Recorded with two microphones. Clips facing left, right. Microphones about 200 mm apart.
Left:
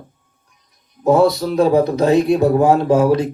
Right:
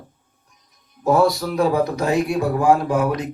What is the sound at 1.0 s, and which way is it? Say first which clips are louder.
Speech: left 4 dB; 25° left (ahead or behind).